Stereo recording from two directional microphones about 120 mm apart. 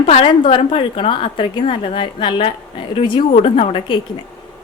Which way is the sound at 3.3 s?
60° left (ahead or behind).